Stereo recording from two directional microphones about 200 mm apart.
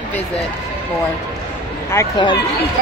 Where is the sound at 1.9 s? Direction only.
20° left (ahead or behind).